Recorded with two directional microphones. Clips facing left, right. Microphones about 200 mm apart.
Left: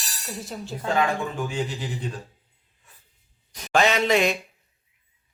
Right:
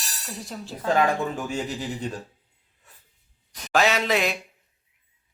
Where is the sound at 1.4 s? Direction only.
40° right (ahead or behind).